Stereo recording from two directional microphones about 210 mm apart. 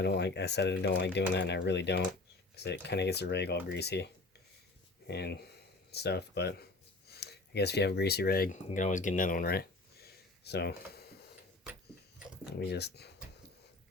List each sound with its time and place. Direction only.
0.0 s speech: 55° left (ahead or behind)
12.5 s speech: 50° left (ahead or behind)